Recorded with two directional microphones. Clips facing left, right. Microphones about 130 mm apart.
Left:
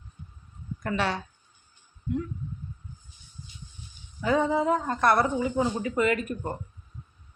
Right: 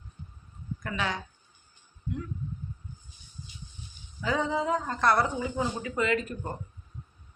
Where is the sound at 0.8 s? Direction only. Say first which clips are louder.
Left 4 dB; 35° left (ahead or behind).